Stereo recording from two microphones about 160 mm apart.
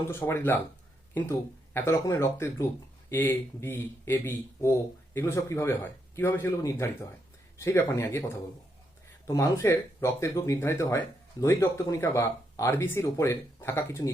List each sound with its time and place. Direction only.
0.1 s speech: 15° left (ahead or behind)
9.2 s speech: 20° left (ahead or behind)